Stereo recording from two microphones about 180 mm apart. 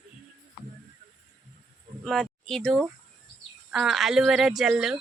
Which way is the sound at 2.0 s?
Centre (ahead or behind).